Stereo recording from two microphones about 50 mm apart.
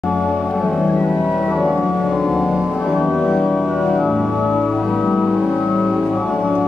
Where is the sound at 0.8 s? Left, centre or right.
Left.